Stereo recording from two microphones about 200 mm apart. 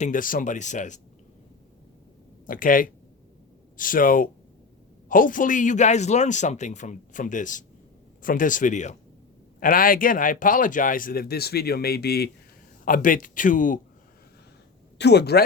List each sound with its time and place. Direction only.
0.0 s a man's voice: 40° left (ahead or behind)
2.5 s a man's voice: 45° left (ahead or behind)
14.9 s speech: 55° left (ahead or behind)